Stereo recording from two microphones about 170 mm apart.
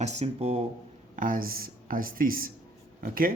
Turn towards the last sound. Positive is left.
turn(degrees=-55)  # may be behind; listen again after turning